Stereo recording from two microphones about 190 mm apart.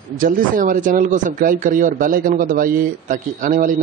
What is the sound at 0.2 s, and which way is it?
A man's voice, 45° right (ahead or behind).